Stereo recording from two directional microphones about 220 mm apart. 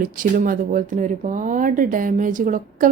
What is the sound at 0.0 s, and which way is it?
Speech, 40° right (ahead or behind).